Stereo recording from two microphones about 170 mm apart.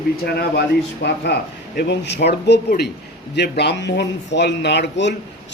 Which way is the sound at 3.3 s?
85° left.